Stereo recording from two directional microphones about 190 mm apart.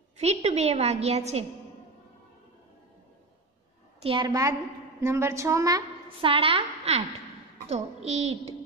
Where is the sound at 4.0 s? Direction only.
25° right (ahead or behind).